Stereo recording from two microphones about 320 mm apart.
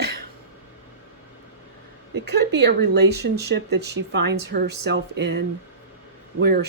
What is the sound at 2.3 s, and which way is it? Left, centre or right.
Speech, right.